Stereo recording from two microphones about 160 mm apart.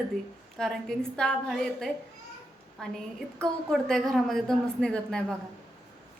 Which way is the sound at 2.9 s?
5° left (ahead or behind).